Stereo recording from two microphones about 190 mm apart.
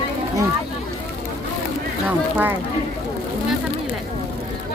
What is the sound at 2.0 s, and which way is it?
Speech, 10° right (ahead or behind).